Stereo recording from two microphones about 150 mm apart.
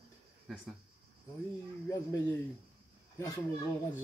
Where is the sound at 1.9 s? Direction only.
20° left (ahead or behind).